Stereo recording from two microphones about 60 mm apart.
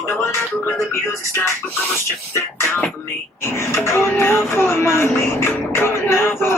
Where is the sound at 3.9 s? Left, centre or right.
Left.